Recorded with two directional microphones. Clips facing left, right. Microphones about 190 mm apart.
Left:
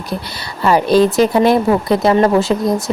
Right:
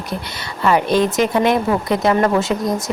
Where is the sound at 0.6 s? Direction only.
35° left (ahead or behind).